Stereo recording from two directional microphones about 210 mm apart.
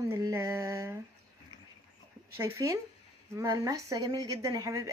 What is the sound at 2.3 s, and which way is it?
A woman's voice, 15° right (ahead or behind).